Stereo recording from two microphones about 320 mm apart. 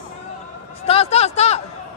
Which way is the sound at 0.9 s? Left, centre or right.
Centre.